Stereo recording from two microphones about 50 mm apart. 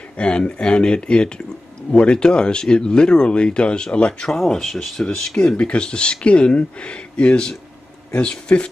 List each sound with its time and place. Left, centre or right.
0.2 s speech: left
4.4 s speech: centre